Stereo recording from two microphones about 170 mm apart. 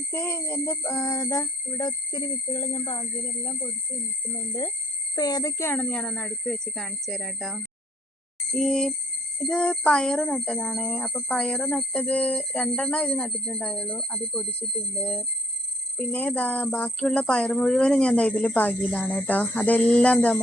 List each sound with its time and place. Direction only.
0.1 s speech: 15° left (ahead or behind)
1.0 s a sound: 20° left (ahead or behind)
5.1 s speech: 25° left (ahead or behind); by 20.4 s 5° left (ahead or behind)